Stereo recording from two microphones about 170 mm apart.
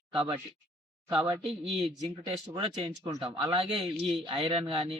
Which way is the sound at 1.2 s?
25° right (ahead or behind).